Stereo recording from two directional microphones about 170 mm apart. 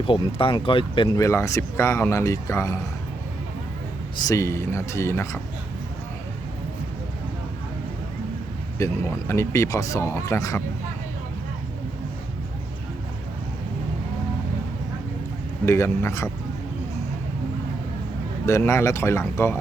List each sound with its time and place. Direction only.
0.0 s speech: 30° left (ahead or behind)
4.2 s speech: 20° left (ahead or behind)
8.8 s speech: 15° left (ahead or behind)
15.6 s speech: 15° left (ahead or behind)
18.4 s speech: 15° left (ahead or behind)